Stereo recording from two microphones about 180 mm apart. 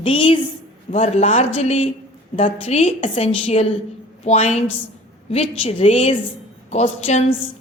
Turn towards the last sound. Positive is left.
turn(degrees=40)  # may be behind; listen again after turning